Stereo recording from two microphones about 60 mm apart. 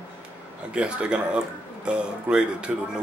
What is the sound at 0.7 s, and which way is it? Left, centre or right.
Speech, centre.